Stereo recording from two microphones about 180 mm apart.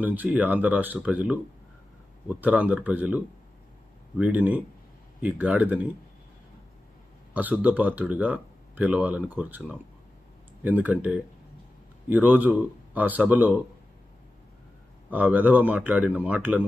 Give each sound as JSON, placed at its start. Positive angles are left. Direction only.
{"t": 0.0, "sound": "speech", "side_deg": -10}
{"t": 7.3, "sound": "speech", "side_deg": -10}
{"t": 15.0, "sound": "speech", "side_deg": -10}